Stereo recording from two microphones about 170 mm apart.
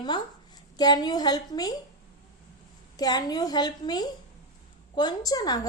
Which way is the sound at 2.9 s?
25° left (ahead or behind).